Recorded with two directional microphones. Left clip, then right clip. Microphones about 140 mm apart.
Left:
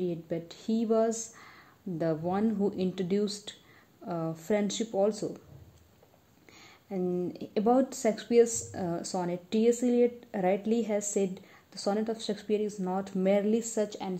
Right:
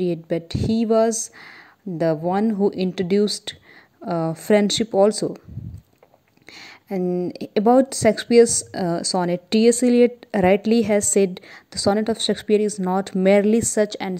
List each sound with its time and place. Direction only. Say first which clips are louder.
0.0 s speech: right 10 dB; 45° right (ahead or behind)
6.5 s speech: right 10 dB; 40° right (ahead or behind)